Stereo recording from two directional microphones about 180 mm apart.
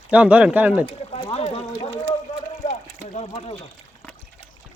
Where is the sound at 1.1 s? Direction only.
35° left (ahead or behind).